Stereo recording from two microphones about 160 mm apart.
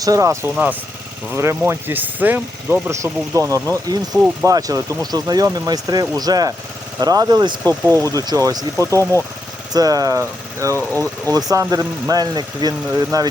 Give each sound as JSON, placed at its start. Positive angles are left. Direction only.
{"t": 0.0, "sound": "speech", "side_deg": -20}
{"t": 10.8, "sound": "speech", "side_deg": 15}
{"t": 11.3, "sound": "speech", "side_deg": -20}